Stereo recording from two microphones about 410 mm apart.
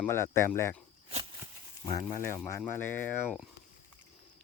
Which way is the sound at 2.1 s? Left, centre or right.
Centre.